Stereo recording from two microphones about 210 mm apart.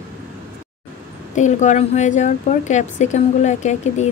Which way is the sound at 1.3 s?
35° left (ahead or behind).